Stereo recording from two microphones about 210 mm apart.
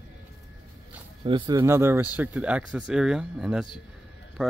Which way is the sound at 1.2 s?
20° right (ahead or behind).